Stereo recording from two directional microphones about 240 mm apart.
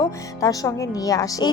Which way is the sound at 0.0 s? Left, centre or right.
Centre.